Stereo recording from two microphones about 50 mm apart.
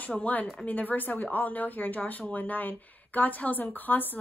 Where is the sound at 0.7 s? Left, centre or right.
Left.